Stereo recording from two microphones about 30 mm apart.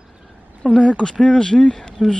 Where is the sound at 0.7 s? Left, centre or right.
Left.